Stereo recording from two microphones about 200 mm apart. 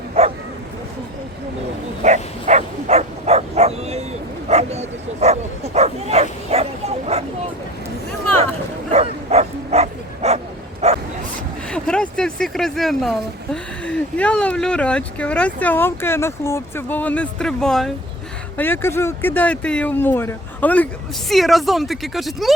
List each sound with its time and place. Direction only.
0.1 s bow-wow: 30° right (ahead or behind)
2.0 s bow-wow: 35° right (ahead or behind)
8.9 s bow-wow: 35° right (ahead or behind)
11.7 s speech: 5° left (ahead or behind)